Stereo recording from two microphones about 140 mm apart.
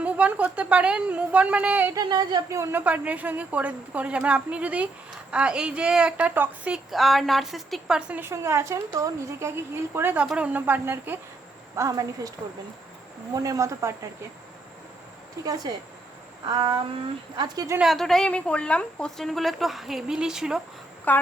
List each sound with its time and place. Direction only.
0.0 s a woman's voice: 10° right (ahead or behind)
1.9 s a woman's voice: 30° right (ahead or behind)
2.8 s a woman's voice: 10° right (ahead or behind)
6.9 s a woman's voice: centre (ahead or behind); by 12.3 s 25° right (ahead or behind)
13.3 s a woman's voice: 25° right (ahead or behind)
15.4 s a woman's voice: 25° right (ahead or behind)
16.5 s a sound: 30° right (ahead or behind)
17.3 s a woman's voice: 30° right (ahead or behind)
17.7 s a woman's voice: centre (ahead or behind)
21.1 s speech: 10° left (ahead or behind)